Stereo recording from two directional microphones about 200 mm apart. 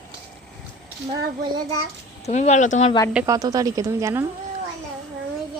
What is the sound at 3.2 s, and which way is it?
Speech, 20° right (ahead or behind).